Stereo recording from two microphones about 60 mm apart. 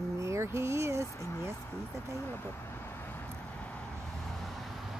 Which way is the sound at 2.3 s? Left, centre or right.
Left.